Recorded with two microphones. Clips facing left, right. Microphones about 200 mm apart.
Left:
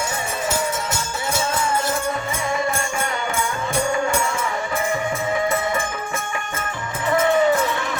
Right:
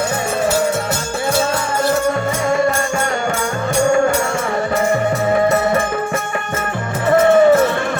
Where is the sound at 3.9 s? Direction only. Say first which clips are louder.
Right 10 dB; 45° right (ahead or behind).